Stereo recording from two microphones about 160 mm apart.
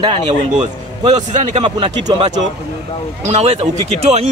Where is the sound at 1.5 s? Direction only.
35° right (ahead or behind).